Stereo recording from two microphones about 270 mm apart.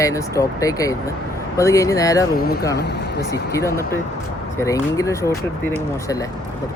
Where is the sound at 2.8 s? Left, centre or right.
Left.